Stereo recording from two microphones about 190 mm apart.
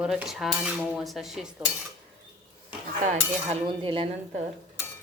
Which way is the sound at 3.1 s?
30° right (ahead or behind).